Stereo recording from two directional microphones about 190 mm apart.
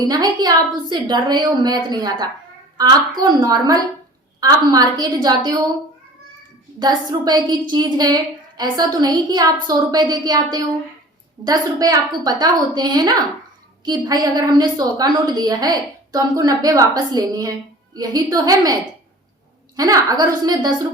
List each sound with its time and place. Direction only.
0.1 s a woman's voice: 20° right (ahead or behind)
6.7 s a woman's voice: 20° right (ahead or behind)